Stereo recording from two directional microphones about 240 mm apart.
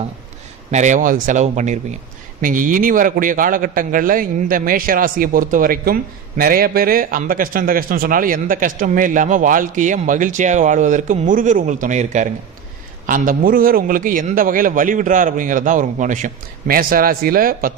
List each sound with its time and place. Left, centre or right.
0.7 s a man's voice: right